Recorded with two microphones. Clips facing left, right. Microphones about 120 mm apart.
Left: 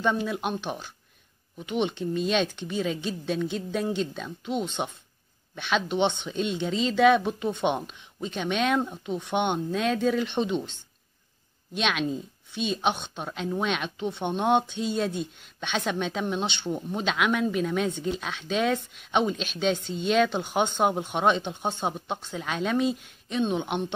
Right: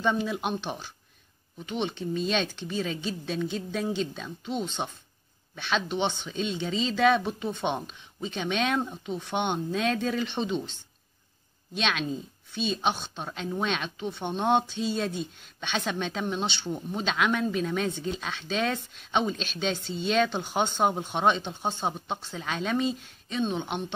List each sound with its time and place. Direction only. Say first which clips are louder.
0.0 s speech: left 1 dB; 5° left (ahead or behind)
4.5 s speech: left 2 dB; 10° left (ahead or behind)